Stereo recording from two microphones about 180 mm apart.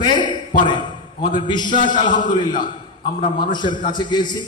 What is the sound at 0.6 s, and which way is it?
Speech, 25° left (ahead or behind).